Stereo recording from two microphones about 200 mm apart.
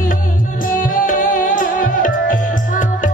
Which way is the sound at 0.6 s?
45° left (ahead or behind).